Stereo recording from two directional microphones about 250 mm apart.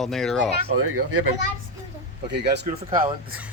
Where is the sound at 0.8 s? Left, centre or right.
Right.